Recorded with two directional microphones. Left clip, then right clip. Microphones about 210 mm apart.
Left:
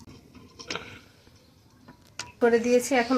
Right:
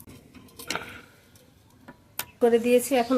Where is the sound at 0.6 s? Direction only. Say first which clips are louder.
Right 3 dB; 60° right (ahead or behind).